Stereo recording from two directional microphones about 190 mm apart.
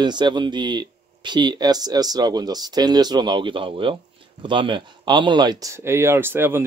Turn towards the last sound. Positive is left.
turn(degrees=-10)  # may be behind; listen again after turning